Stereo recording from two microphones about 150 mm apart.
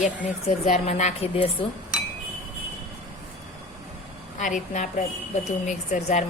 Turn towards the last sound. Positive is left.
turn(degrees=55)  # may be behind; listen again after turning